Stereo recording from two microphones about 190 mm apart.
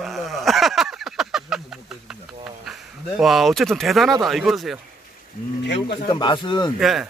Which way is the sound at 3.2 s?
Centre (ahead or behind).